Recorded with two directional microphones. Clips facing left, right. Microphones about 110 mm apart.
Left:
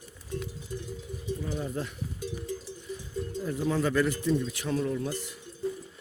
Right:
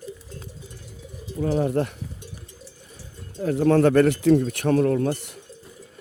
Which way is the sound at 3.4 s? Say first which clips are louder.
Right 11 dB; 65° right (ahead or behind).